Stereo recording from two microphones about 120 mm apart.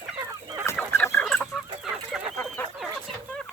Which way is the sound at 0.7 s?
15° left (ahead or behind).